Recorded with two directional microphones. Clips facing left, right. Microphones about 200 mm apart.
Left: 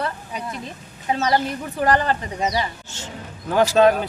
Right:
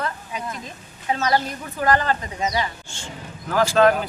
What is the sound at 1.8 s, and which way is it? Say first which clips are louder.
Speech: left 1 dB; 35° left (ahead or behind).